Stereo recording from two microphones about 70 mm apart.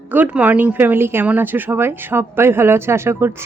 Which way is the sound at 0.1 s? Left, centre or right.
Right.